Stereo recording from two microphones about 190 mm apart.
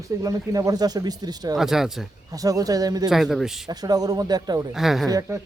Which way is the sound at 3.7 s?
20° right (ahead or behind).